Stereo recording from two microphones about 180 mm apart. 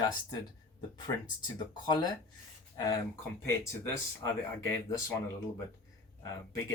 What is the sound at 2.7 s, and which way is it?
Speech, 20° left (ahead or behind).